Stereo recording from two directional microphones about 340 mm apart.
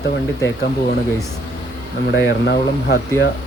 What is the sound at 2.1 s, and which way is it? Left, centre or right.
Speech, left.